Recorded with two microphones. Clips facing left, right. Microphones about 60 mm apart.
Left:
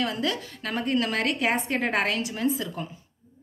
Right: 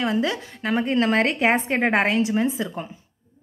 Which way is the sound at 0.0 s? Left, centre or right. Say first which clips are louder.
Right 4 dB; right.